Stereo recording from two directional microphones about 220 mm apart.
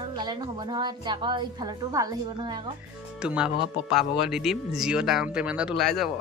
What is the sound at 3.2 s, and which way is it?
A man's voice, 5° right (ahead or behind).